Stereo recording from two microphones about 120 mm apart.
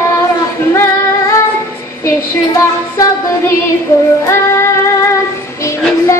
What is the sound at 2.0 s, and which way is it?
Music, 25° left (ahead or behind).